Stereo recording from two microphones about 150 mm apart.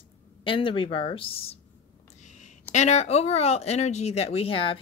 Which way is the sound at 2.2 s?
55° left (ahead or behind).